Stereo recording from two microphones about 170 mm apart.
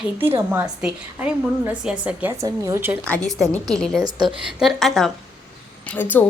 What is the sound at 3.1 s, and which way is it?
Speech, 5° left (ahead or behind).